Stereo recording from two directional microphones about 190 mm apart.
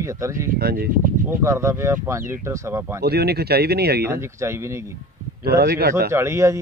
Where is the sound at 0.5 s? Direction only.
55° right (ahead or behind).